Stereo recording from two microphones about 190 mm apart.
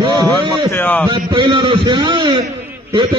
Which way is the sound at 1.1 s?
25° right (ahead or behind).